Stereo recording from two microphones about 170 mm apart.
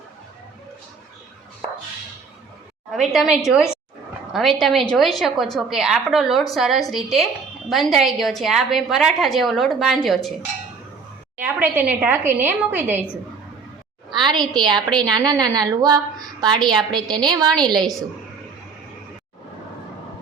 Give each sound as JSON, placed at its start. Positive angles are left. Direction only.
{"t": 2.9, "sound": "a woman's voice", "side_deg": 0}
{"t": 11.3, "sound": "a woman's voice", "side_deg": -10}
{"t": 14.1, "sound": "a woman's voice", "side_deg": -25}